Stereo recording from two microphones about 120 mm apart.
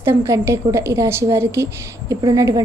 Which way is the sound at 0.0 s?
20° right (ahead or behind).